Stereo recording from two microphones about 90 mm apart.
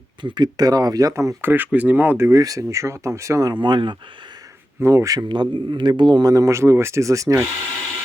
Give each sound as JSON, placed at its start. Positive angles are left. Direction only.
{"t": 0.2, "sound": "speech", "side_deg": -55}
{"t": 1.4, "sound": "speech", "side_deg": -25}
{"t": 2.4, "sound": "speech", "side_deg": -40}
{"t": 3.5, "sound": "a man's voice", "side_deg": -60}
{"t": 4.8, "sound": "speech", "side_deg": -30}
{"t": 5.3, "sound": "a man's voice", "side_deg": -60}
{"t": 6.3, "sound": "speech", "side_deg": -35}